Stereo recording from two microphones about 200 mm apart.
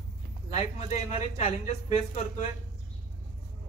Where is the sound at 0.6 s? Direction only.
30° left (ahead or behind).